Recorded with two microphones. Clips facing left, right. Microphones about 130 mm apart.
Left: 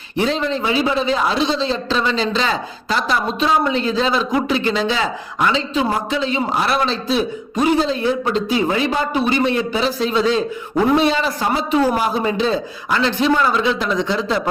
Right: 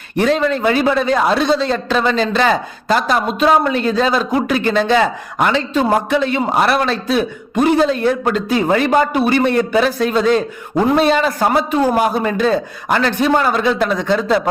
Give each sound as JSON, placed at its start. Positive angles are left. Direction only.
{"t": 0.2, "sound": "a man's voice", "side_deg": -55}